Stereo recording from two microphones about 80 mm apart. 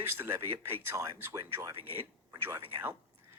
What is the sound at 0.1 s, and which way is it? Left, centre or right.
A man's voice, right.